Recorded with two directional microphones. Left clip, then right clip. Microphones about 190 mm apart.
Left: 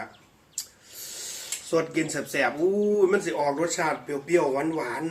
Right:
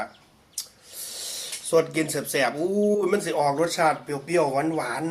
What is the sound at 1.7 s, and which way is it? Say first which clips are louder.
A man's voice: right 4 dB; 25° right (ahead or behind).